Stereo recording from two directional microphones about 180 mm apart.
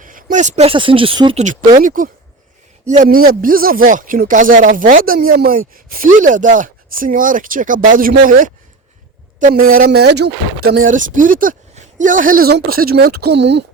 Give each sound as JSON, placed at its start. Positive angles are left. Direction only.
{"t": 0.0, "sound": "speech", "side_deg": -45}
{"t": 1.4, "sound": "a woman's voice", "side_deg": -40}
{"t": 10.8, "sound": "speech", "side_deg": -45}